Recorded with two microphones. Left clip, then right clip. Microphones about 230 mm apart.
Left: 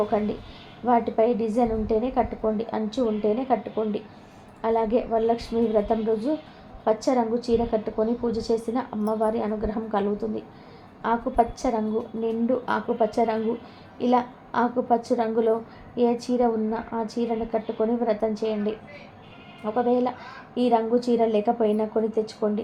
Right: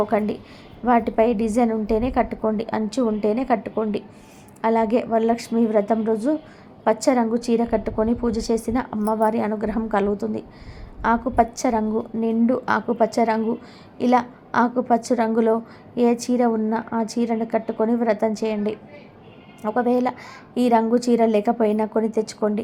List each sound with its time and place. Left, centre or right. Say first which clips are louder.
0.1 s a woman's voice: right 3 dB; right